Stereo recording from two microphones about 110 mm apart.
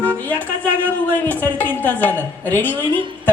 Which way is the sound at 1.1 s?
15° left (ahead or behind).